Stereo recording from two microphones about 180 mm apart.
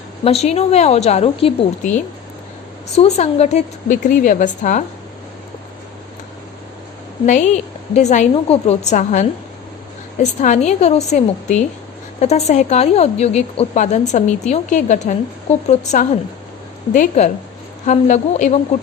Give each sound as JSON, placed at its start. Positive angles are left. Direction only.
{"t": 0.3, "sound": "a woman's voice", "side_deg": 35}
{"t": 7.3, "sound": "a woman's voice", "side_deg": 40}
{"t": 10.4, "sound": "a woman's voice", "side_deg": 40}